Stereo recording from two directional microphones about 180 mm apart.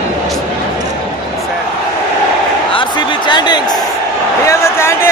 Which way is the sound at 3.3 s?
25° left (ahead or behind).